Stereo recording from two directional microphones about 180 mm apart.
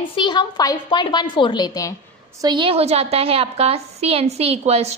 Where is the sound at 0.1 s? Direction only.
25° left (ahead or behind).